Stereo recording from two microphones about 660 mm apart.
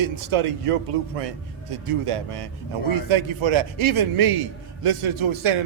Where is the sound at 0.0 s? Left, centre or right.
Right.